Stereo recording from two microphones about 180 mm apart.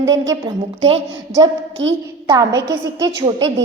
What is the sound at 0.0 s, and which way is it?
Speech, 20° right (ahead or behind).